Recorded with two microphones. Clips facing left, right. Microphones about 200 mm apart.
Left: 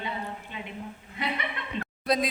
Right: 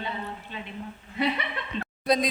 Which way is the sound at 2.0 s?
5° left (ahead or behind).